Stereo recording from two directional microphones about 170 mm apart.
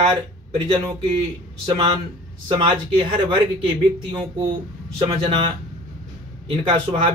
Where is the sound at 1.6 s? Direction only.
30° right (ahead or behind).